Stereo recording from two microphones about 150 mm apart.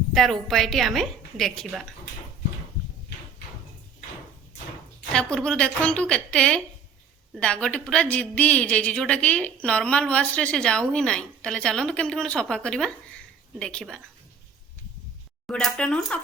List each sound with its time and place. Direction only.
0.1 s a woman's voice: centre (ahead or behind)
5.1 s a woman's voice: 5° left (ahead or behind)
15.4 s a woman's voice: 5° left (ahead or behind)